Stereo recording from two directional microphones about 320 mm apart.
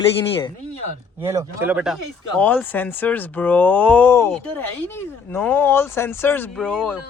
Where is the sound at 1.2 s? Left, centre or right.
Centre.